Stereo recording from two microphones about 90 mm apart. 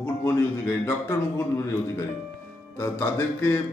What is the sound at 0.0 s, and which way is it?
Speech, 30° left (ahead or behind).